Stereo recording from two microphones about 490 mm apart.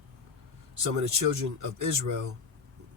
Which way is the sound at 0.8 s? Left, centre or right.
Right.